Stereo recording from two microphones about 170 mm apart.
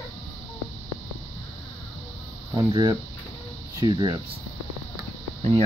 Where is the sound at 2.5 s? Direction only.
25° right (ahead or behind).